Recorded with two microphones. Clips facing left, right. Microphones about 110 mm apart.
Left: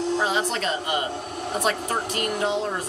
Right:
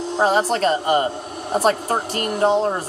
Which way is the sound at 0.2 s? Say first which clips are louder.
Right 7 dB; 40° right (ahead or behind).